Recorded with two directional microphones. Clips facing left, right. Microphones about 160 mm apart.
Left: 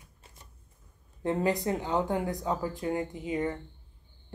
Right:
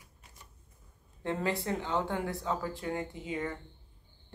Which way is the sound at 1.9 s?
40° left (ahead or behind).